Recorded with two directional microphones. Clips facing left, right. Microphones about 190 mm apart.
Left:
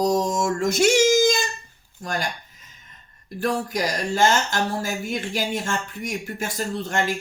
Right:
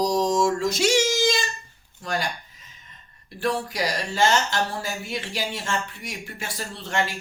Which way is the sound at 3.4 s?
45° left (ahead or behind).